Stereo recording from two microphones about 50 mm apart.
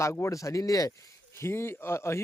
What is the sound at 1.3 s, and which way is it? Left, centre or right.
Speech, left.